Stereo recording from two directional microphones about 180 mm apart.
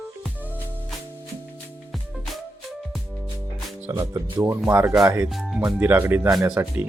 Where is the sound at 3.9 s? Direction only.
20° right (ahead or behind).